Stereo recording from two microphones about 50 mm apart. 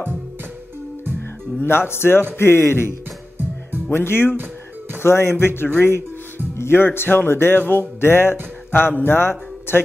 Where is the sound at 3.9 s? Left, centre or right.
Left.